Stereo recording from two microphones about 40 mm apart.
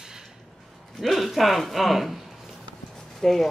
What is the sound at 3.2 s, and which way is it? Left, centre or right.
Speech, centre.